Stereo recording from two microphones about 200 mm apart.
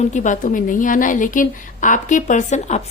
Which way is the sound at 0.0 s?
40° left (ahead or behind).